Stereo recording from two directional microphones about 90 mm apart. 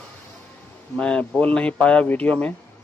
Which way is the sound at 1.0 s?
15° left (ahead or behind).